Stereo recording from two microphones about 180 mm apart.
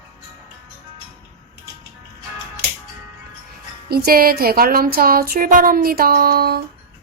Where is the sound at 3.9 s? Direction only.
55° right (ahead or behind).